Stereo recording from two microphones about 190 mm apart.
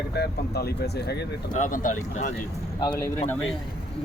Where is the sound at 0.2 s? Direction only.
60° left (ahead or behind).